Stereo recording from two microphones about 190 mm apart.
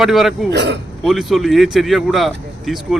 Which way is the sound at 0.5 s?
65° right (ahead or behind).